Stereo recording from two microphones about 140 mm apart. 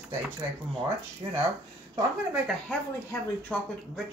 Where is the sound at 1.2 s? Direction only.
25° right (ahead or behind).